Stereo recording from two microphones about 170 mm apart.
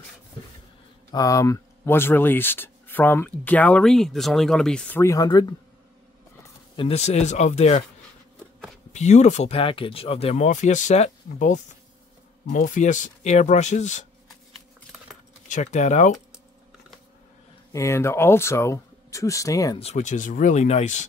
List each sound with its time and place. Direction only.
1.1 s speech: 20° left (ahead or behind)
6.8 s speech: 40° left (ahead or behind)
8.9 s speech: 40° left (ahead or behind)
15.4 s speech: 45° left (ahead or behind)
17.7 s speech: 15° left (ahead or behind)
19.8 s speech: 40° left (ahead or behind)